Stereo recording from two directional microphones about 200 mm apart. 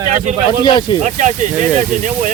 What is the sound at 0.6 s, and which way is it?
Speech, 20° left (ahead or behind).